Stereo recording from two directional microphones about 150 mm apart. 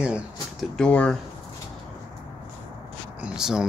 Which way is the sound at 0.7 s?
5° left (ahead or behind).